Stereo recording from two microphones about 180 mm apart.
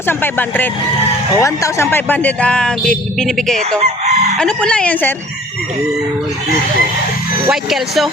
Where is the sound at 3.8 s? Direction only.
40° right (ahead or behind).